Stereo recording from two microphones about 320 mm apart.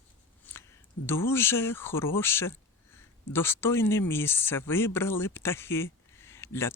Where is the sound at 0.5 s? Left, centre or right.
Centre.